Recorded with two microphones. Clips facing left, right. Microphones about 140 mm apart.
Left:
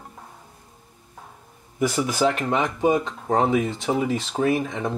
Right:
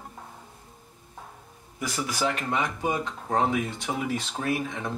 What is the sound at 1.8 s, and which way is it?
Speech, 25° left (ahead or behind).